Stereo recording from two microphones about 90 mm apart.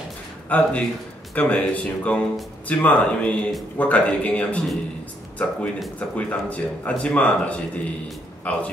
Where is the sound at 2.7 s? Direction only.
15° left (ahead or behind).